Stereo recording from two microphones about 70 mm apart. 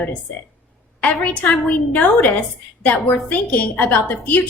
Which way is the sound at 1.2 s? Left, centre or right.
Left.